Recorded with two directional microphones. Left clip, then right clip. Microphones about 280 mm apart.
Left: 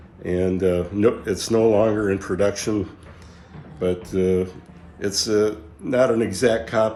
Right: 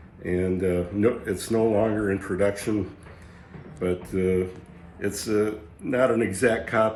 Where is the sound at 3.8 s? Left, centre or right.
Centre.